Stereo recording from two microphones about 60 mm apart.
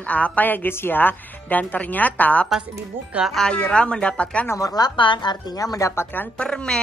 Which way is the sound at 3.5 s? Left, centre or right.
Centre.